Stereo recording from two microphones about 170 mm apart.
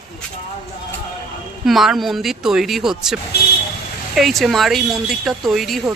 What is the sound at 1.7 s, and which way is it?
Speech, centre (ahead or behind).